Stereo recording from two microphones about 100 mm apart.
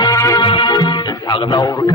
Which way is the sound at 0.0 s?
35° left (ahead or behind).